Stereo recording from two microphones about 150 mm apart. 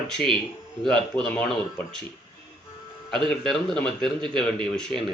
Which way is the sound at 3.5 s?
5° left (ahead or behind).